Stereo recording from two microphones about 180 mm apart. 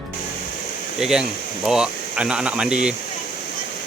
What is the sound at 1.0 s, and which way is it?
Speech, 5° right (ahead or behind).